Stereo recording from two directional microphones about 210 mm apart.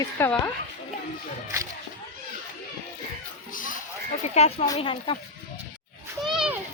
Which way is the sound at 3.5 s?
40° left (ahead or behind).